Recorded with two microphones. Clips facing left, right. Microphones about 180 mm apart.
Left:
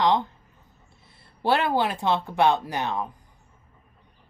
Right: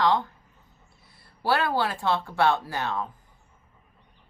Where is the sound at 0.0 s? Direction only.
20° left (ahead or behind).